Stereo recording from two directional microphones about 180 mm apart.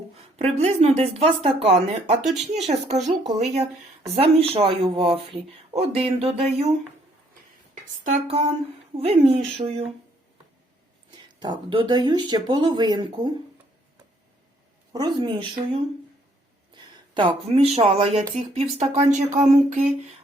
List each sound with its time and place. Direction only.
0.3 s speech: 35° right (ahead or behind)
8.0 s speech: 35° right (ahead or behind)
11.4 s speech: 25° right (ahead or behind)
14.9 s speech: 25° right (ahead or behind)
17.2 s speech: 30° right (ahead or behind)